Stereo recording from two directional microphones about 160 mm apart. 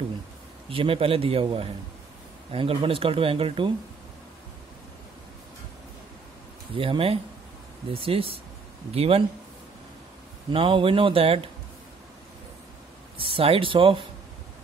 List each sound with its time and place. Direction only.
0.7 s speech: 35° right (ahead or behind)
6.7 s speech: 35° right (ahead or behind)
10.5 s speech: 35° right (ahead or behind)
13.2 s speech: 35° right (ahead or behind)